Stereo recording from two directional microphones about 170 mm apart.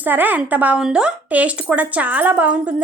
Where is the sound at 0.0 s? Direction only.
10° right (ahead or behind).